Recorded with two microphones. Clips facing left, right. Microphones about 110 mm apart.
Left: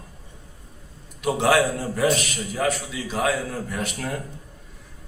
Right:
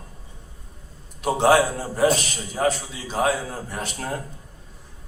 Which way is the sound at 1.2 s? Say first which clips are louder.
Right 2 dB; 30° right (ahead or behind).